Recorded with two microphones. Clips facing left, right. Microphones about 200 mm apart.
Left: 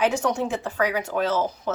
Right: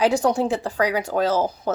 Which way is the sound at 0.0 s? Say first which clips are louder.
Right 4 dB; 35° right (ahead or behind).